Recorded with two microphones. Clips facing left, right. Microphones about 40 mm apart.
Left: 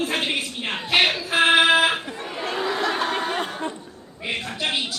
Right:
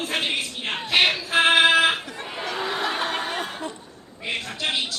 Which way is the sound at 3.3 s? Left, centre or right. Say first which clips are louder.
Left 3 dB; left.